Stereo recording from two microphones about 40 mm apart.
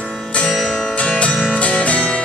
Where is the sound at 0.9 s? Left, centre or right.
Left.